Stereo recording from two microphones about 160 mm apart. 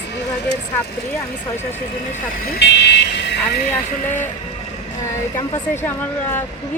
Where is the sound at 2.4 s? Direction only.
80° left.